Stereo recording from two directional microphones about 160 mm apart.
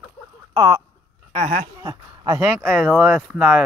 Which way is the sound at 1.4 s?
50° right (ahead or behind).